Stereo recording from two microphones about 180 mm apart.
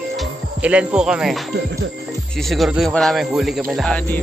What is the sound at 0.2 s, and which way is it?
Speech, 5° right (ahead or behind).